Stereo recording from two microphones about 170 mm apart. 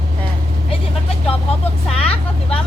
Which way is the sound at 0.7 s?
35° left (ahead or behind).